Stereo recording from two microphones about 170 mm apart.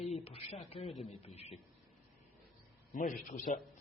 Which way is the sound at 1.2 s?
35° left (ahead or behind).